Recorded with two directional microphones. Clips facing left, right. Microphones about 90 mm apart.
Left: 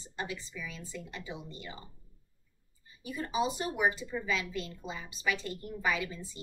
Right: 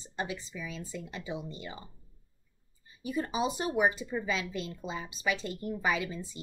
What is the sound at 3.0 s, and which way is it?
Speech, 20° right (ahead or behind).